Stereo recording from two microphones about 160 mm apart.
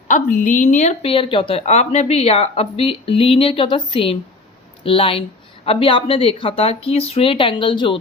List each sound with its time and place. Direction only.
0.1 s speech: 55° left (ahead or behind); by 7.9 s 30° left (ahead or behind)